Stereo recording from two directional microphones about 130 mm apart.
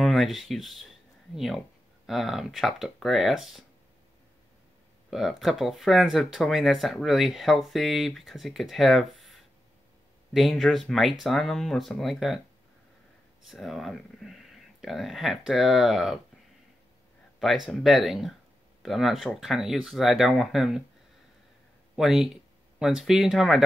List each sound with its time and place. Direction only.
0.0 s speech: centre (ahead or behind)
5.1 s speech: centre (ahead or behind)
13.5 s speech: centre (ahead or behind)
17.6 s speech: centre (ahead or behind)
21.9 s speech: centre (ahead or behind)